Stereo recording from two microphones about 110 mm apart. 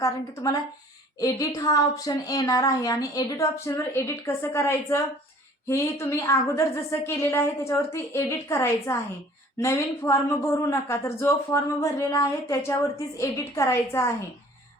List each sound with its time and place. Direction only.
1.2 s a woman's voice: 35° left (ahead or behind)